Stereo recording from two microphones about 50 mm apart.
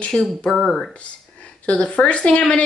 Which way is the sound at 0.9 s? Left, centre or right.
Left.